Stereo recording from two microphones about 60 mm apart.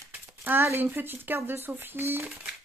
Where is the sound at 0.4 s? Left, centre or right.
Right.